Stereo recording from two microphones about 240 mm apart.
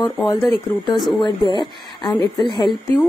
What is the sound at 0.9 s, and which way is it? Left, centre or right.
Speech, centre.